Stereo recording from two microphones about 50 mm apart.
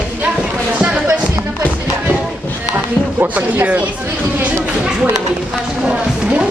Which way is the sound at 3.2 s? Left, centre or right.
Right.